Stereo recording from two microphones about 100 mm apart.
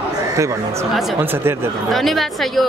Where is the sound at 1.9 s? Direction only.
Centre (ahead or behind).